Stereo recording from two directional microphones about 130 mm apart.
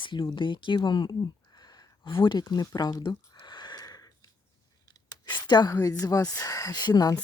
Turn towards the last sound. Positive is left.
turn(degrees=30)  # may be behind; listen again after turning